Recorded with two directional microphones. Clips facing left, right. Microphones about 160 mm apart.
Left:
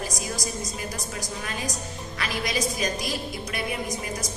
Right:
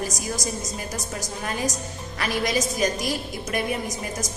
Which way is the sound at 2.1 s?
45° right (ahead or behind).